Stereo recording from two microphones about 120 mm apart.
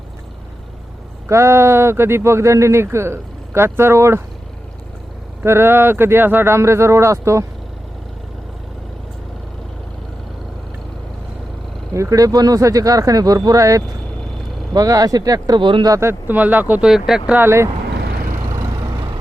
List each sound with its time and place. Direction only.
1.3 s speech: 25° right (ahead or behind)
5.4 s speech: 20° right (ahead or behind)
11.9 s speech: 25° right (ahead or behind)
15.9 s speech: 20° right (ahead or behind); by 17.4 s 5° right (ahead or behind)
17.4 s speech: 20° right (ahead or behind)
18.8 s vehicle: 40° right (ahead or behind)